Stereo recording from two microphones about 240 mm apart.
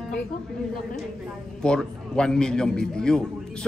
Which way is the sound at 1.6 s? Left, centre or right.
Centre.